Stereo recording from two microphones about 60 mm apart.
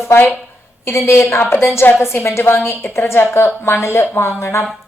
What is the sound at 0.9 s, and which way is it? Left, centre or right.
A woman's voice, left.